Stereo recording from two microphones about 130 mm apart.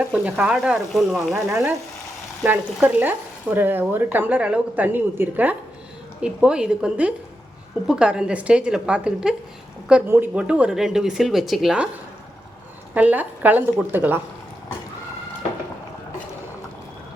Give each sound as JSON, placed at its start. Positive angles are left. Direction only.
{"t": 0.0, "sound": "speech", "side_deg": -10}
{"t": 1.5, "sound": "frying", "side_deg": -20}
{"t": 2.4, "sound": "speech", "side_deg": -10}
{"t": 12.9, "sound": "speech", "side_deg": -10}